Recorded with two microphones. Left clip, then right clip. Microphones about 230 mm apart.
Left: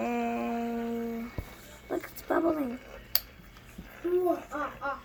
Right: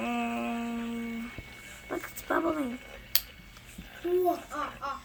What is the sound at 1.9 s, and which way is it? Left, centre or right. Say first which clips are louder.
Speech: left 1 dB; centre.